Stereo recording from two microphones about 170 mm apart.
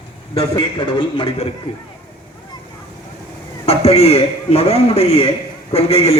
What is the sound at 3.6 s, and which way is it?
A man's voice, 35° left (ahead or behind).